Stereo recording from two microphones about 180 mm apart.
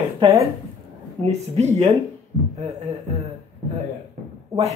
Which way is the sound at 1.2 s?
35° right (ahead or behind).